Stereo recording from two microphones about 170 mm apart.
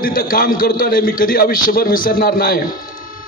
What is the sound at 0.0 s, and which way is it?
A man's voice, 60° left (ahead or behind).